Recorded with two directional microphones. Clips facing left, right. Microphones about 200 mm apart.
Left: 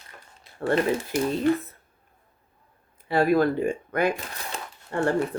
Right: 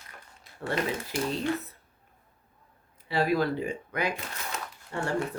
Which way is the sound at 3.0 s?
50° left (ahead or behind).